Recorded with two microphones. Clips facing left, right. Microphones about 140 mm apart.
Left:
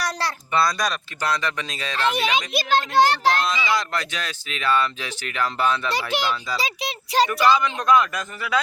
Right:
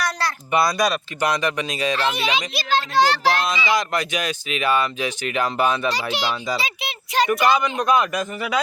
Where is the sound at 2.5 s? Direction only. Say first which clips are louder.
Left 1 dB; 50° left (ahead or behind).